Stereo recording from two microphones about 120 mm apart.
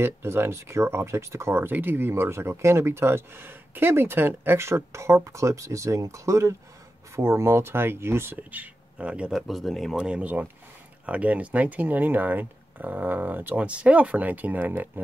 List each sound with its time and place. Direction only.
0.0 s speech: 20° right (ahead or behind)
9.5 s speech: centre (ahead or behind); by 14.9 s 15° right (ahead or behind)